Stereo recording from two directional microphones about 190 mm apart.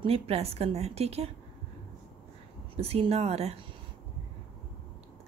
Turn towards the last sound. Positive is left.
turn(degrees=-35)  # may be behind; listen again after turning